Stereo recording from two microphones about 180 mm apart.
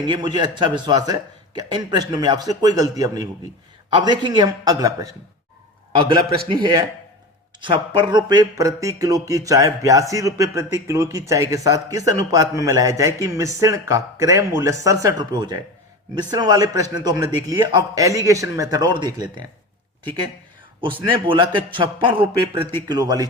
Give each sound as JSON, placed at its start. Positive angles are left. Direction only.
{"t": 0.0, "sound": "speech", "side_deg": -25}
{"t": 20.8, "sound": "speech", "side_deg": -25}